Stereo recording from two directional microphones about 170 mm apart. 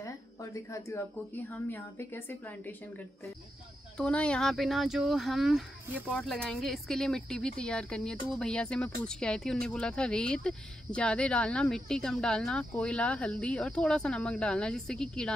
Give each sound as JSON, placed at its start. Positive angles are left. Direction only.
{"t": 0.0, "sound": "a sound", "side_deg": 20}
{"t": 1.7, "sound": "a woman's voice", "side_deg": 10}
{"t": 3.9, "sound": "speech", "side_deg": 5}